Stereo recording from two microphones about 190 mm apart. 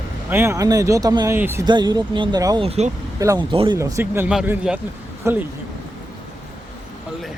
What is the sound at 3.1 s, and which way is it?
Speech, 15° right (ahead or behind).